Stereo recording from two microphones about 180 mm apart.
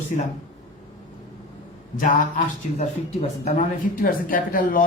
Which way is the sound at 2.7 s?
35° left (ahead or behind).